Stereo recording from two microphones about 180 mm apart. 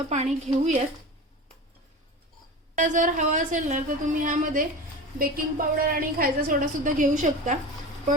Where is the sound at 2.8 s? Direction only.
45° right (ahead or behind).